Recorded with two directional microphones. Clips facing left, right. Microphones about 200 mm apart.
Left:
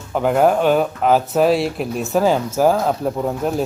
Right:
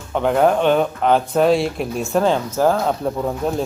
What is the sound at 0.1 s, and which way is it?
Speech, 5° left (ahead or behind).